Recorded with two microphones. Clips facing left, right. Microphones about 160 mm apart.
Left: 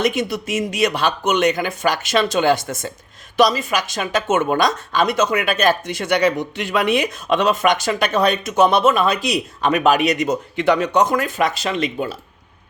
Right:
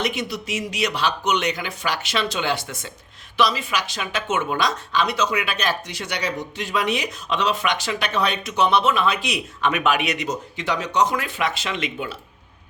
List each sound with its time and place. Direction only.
0.0 s speech: 50° left (ahead or behind)
10.2 s speech: 60° left (ahead or behind); by 12.1 s 40° left (ahead or behind)